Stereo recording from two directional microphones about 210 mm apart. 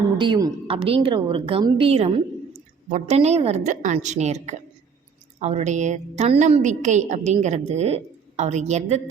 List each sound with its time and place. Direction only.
0.2 s a woman's voice: 20° right (ahead or behind)